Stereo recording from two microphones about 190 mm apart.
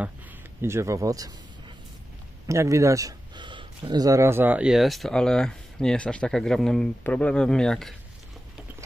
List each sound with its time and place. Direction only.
0.6 s speech: 15° right (ahead or behind)
2.4 s a man's voice: 15° right (ahead or behind); by 7.9 s 5° left (ahead or behind)